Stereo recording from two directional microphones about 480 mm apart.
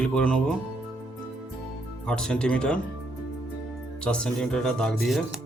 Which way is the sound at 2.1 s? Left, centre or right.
Centre.